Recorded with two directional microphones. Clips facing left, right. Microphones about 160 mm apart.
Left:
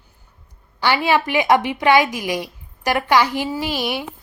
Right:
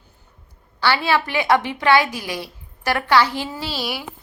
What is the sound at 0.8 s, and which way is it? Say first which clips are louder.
A woman's voice: left 2 dB; 15° left (ahead or behind).